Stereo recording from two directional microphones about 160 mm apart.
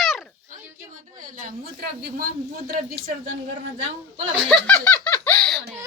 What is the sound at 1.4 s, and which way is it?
Speech, 75° right (ahead or behind).